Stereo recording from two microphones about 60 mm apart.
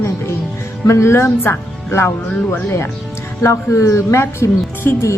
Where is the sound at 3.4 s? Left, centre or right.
Left.